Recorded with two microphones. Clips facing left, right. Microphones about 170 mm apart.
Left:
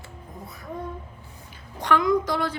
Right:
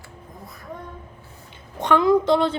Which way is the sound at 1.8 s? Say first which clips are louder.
Right 4 dB; 25° right (ahead or behind).